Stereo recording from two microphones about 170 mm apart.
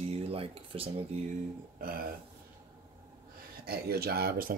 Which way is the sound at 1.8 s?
55° right (ahead or behind).